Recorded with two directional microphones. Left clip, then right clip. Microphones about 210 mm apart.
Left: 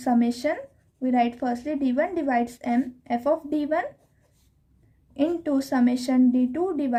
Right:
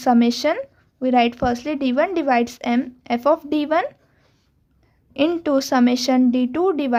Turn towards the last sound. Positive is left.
turn(degrees=-45)  # may be behind; listen again after turning